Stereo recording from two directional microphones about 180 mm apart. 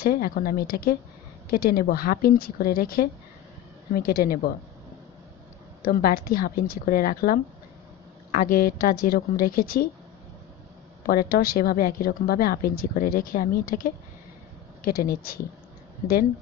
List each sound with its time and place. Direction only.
0.0 s a woman's voice: 55° left (ahead or behind)
5.8 s a woman's voice: 55° left (ahead or behind)
11.1 s a woman's voice: 55° left (ahead or behind)